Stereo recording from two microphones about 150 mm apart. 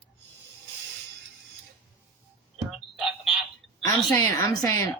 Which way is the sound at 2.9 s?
Centre (ahead or behind).